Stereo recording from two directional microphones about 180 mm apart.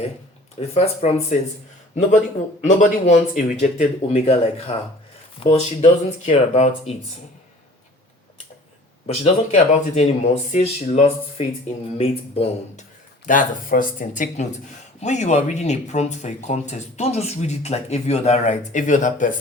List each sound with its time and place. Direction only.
0.6 s speech: 35° left (ahead or behind)
2.6 s speech: 45° left (ahead or behind)
9.0 s speech: 35° left (ahead or behind)
13.2 s speech: 50° left (ahead or behind)